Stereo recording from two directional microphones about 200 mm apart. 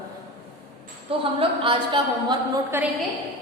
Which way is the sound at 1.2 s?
25° right (ahead or behind).